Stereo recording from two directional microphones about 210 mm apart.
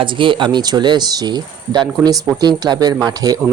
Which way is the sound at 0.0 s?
25° right (ahead or behind).